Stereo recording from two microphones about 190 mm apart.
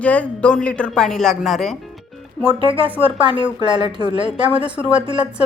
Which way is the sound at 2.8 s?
10° right (ahead or behind).